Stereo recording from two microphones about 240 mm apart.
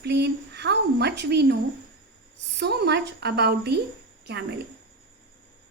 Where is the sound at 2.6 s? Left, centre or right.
Right.